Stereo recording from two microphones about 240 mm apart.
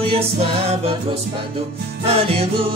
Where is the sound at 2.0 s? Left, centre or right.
Right.